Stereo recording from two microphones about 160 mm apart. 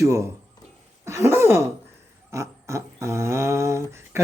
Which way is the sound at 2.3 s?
20° right (ahead or behind).